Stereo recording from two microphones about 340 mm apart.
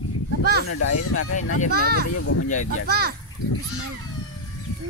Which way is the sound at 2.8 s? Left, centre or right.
Right.